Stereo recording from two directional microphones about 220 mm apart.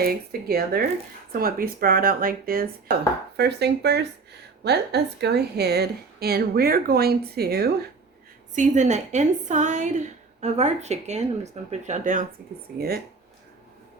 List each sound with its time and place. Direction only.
0.0 s a woman's voice: 45° right (ahead or behind)
8.5 s speech: 35° right (ahead or behind)